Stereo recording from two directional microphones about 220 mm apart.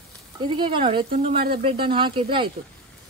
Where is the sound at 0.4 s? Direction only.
20° right (ahead or behind).